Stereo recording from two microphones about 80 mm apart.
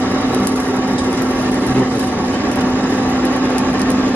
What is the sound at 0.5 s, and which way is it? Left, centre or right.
Wood, right.